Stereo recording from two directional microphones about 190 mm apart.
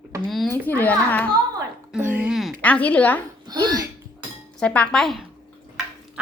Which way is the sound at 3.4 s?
20° right (ahead or behind).